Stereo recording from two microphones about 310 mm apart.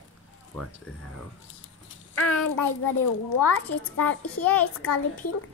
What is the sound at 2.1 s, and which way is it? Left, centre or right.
A child's voice, left.